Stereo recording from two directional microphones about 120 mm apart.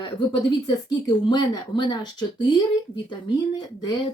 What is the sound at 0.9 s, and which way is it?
Speech, 35° left (ahead or behind).